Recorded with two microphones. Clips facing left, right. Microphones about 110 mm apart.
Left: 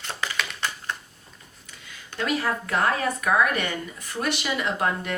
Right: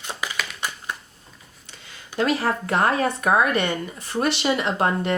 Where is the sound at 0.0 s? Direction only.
15° right (ahead or behind).